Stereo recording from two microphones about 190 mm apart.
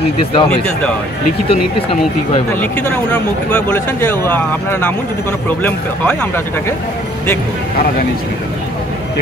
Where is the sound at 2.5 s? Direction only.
5° left (ahead or behind).